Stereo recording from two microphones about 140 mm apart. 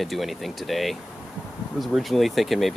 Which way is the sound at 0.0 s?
Centre (ahead or behind).